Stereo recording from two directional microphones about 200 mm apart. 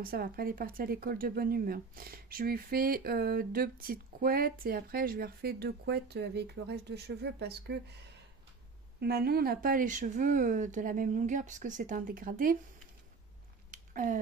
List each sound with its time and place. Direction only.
0.0 s speech: 45° right (ahead or behind)
9.0 s speech: 50° right (ahead or behind)
13.7 s a sound: 40° right (ahead or behind)